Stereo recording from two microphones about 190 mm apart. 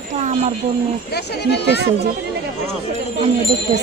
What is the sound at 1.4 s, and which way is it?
Speech, 60° left (ahead or behind).